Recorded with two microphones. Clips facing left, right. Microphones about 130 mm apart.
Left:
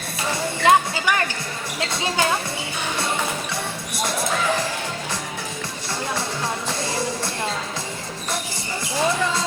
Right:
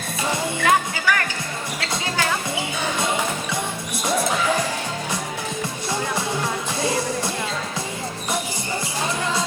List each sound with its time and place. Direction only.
0.6 s music: 20° left (ahead or behind)